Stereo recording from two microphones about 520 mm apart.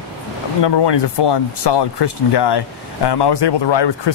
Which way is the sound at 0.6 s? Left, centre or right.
Left.